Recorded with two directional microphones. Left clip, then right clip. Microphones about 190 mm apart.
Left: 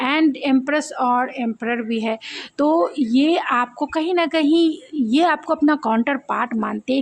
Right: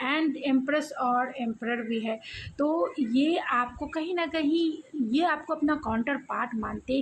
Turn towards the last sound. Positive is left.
turn(degrees=55)  # may be behind; listen again after turning